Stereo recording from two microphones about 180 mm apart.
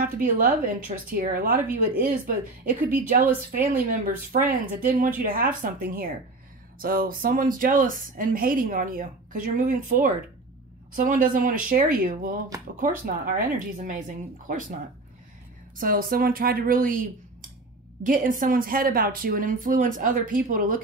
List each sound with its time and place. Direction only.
0.0 s a woman's voice: 50° right (ahead or behind)
3.9 s a woman's voice: 50° right (ahead or behind)
15.8 s a woman's voice: 50° right (ahead or behind)